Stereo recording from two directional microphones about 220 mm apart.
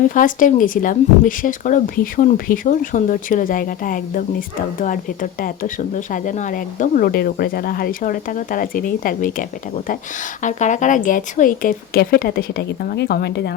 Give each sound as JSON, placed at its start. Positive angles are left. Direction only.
{"t": 0.0, "sound": "speech", "side_deg": 35}